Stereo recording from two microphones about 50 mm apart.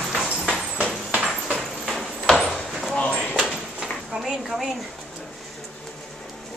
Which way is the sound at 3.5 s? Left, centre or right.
Centre.